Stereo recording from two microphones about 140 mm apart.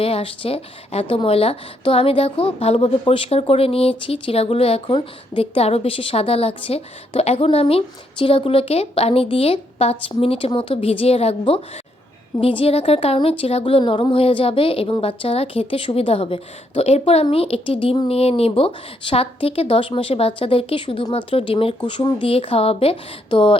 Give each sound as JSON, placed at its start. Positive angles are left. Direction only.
{"t": 0.0, "sound": "a woman's voice", "side_deg": 40}